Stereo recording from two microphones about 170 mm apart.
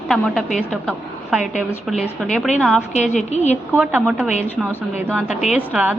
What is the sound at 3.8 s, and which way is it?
Speech, 5° right (ahead or behind).